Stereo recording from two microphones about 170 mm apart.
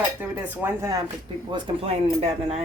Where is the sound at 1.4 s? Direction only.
30° right (ahead or behind).